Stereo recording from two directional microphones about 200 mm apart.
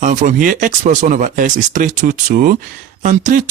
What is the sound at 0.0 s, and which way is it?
Speech, 40° right (ahead or behind).